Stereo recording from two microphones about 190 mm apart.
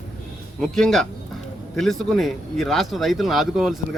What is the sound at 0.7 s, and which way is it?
Speech, centre (ahead or behind).